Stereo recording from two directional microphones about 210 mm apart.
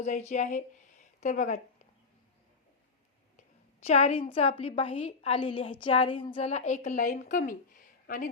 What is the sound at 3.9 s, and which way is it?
A woman's voice, 30° left (ahead or behind).